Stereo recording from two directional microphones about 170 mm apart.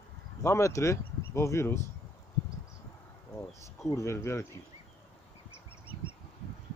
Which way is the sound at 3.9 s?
15° left (ahead or behind).